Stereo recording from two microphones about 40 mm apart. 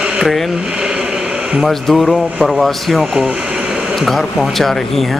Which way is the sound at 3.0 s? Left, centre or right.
Centre.